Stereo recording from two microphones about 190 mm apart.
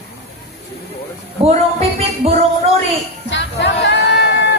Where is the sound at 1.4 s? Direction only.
30° right (ahead or behind).